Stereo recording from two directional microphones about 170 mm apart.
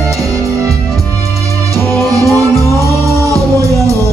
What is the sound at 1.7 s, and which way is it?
Music, 20° right (ahead or behind).